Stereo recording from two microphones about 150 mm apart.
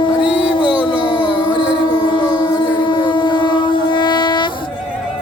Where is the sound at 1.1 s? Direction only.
35° left (ahead or behind).